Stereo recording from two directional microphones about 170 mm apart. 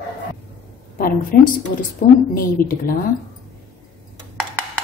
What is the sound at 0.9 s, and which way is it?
A woman's voice, 60° left (ahead or behind).